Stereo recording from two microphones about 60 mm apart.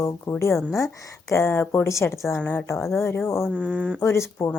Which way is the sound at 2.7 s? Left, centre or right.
Left.